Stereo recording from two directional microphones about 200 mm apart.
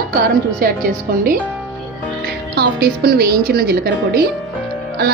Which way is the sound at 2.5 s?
55° right (ahead or behind).